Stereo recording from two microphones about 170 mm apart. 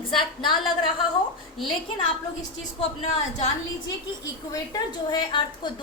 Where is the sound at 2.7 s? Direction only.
40° left (ahead or behind).